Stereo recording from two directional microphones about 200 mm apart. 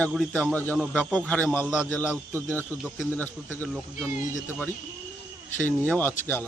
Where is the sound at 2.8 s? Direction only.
5° left (ahead or behind).